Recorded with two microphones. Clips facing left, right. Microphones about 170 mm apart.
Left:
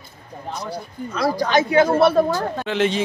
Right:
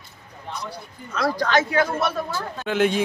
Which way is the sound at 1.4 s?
15° left (ahead or behind).